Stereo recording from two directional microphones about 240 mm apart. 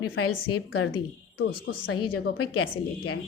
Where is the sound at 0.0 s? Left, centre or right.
Left.